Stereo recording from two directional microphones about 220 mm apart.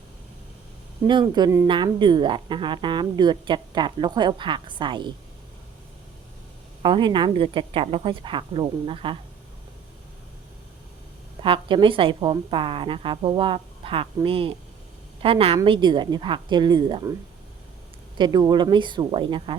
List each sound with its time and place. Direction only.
1.0 s a woman's voice: 20° right (ahead or behind)
6.8 s a woman's voice: 20° right (ahead or behind)
11.4 s a woman's voice: 25° right (ahead or behind)
18.2 s a woman's voice: 20° right (ahead or behind)